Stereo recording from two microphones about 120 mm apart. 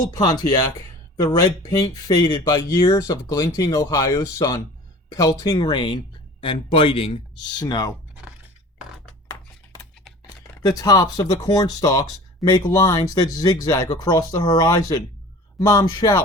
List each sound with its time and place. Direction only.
0.0 s speech: 30° left (ahead or behind)
5.5 s speech: 40° left (ahead or behind)
7.6 s speech: 35° left (ahead or behind)
10.6 s speech: 35° left (ahead or behind)